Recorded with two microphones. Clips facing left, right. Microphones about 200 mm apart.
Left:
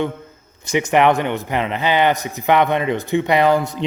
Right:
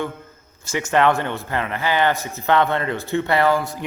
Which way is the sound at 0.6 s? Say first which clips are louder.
Left 3 dB; 20° left (ahead or behind).